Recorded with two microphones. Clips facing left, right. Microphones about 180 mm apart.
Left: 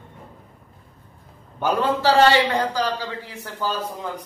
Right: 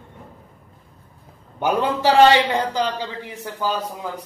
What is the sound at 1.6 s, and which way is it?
A man's voice, 15° right (ahead or behind).